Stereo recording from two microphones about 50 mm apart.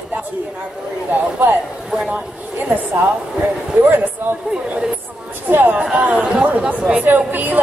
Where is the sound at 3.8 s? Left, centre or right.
Right.